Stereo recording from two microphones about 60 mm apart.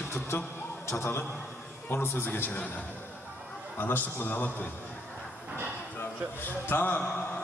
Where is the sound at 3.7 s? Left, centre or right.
Left.